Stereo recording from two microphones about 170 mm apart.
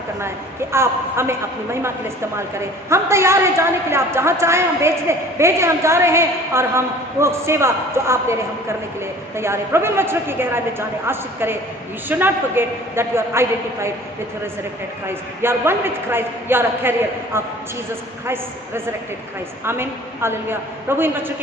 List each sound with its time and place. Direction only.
0.7 s a woman's voice: 15° right (ahead or behind)
2.9 s a woman's voice: 15° right (ahead or behind)
15.0 s a woman's voice: 15° right (ahead or behind)
19.6 s a woman's voice: 15° right (ahead or behind)